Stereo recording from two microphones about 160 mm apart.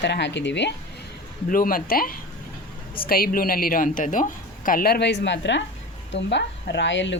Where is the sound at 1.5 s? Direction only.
60° left (ahead or behind); by 6.9 s 90° left.